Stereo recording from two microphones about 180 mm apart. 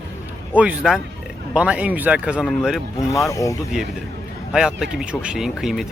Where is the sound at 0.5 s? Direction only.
5° right (ahead or behind).